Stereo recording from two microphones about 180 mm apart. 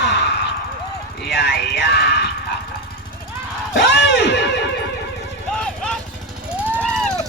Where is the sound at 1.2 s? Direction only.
70° left (ahead or behind).